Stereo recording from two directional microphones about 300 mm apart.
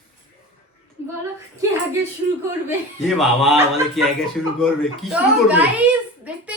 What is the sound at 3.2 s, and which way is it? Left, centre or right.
Speech, centre.